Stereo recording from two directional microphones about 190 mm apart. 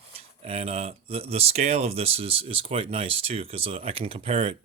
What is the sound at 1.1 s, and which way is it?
Speech, 30° right (ahead or behind).